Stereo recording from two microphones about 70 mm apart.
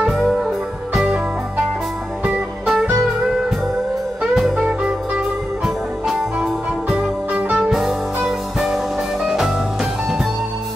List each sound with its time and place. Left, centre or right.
0.0 s music: centre
2.7 s music: centre
4.2 s music: centre
7.3 s music: right
7.7 s music: centre